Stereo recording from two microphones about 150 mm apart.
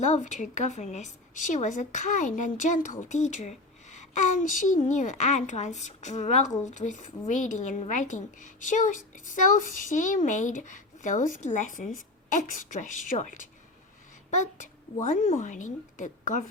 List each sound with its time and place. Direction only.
0.0 s a woman's voice: 55° left (ahead or behind)